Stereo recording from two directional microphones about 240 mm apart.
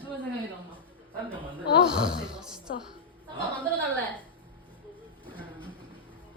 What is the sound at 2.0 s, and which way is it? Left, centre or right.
Speech, centre.